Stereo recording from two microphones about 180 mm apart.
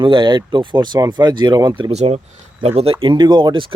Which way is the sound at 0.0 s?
25° right (ahead or behind).